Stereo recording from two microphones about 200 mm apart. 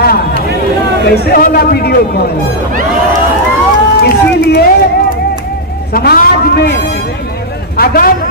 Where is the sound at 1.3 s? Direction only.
50° left (ahead or behind).